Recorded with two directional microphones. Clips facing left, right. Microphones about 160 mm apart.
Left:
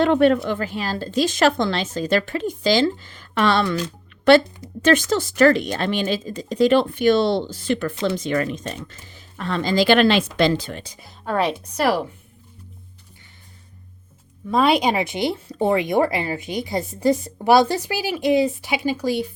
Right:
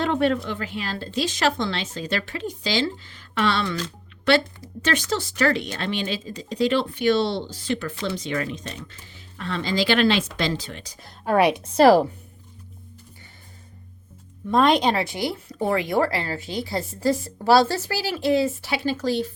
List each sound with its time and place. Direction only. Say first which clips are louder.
0.0 s a woman's voice: left 6 dB; 60° left (ahead or behind)
0.4 s speech: left 5 dB; 45° left (ahead or behind)
4.8 s speech: left 7 dB; 45° left (ahead or behind)
11.3 s a woman's voice: right 3 dB; 10° right (ahead or behind)
11.6 s a woman's voice: right 6 dB; 30° right (ahead or behind)
14.4 s speech: left 1 dB; 5° left (ahead or behind)